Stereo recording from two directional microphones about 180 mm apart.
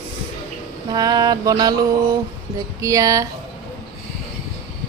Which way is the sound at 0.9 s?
20° right (ahead or behind).